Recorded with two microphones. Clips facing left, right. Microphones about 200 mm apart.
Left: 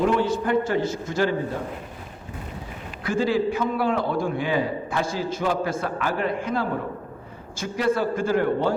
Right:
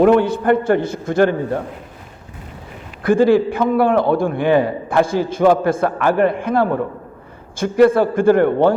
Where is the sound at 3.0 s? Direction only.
55° right (ahead or behind).